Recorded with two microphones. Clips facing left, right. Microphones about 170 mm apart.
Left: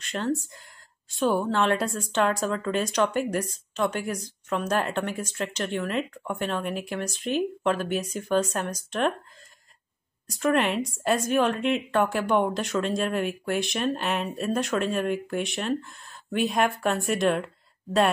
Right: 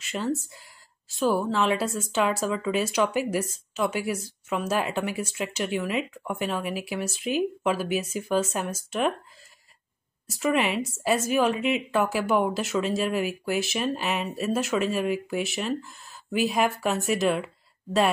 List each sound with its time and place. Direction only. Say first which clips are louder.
0.0 s a woman's voice: left 1 dB; 5° right (ahead or behind)
10.2 s a woman's voice: left 1 dB; 5° right (ahead or behind)